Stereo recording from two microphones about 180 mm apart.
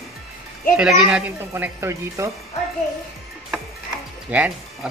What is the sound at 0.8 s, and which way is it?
Speech, 5° right (ahead or behind).